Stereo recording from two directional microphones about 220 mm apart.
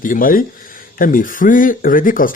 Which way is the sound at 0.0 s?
40° left (ahead or behind).